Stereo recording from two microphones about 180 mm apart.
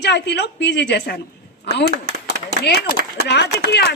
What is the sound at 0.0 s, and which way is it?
A woman's voice, 70° left (ahead or behind).